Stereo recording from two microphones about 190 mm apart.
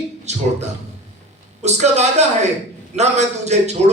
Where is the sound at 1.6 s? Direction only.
35° right (ahead or behind).